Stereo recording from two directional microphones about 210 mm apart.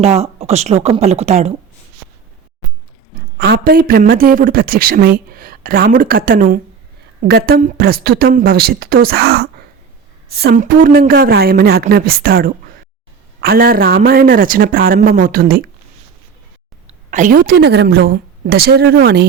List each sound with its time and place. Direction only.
0.0 s speech: 30° right (ahead or behind)
3.3 s a woman's voice: 50° right (ahead or behind)
16.8 s a woman's voice: 35° right (ahead or behind); by 19.3 s 50° right (ahead or behind)